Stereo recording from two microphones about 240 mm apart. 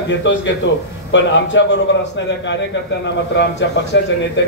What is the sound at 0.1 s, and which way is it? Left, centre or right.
A man's voice, left.